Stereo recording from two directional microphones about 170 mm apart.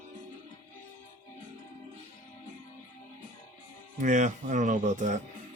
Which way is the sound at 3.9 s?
45° right (ahead or behind).